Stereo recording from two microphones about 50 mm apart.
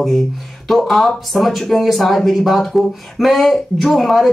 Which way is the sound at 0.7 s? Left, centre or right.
Centre.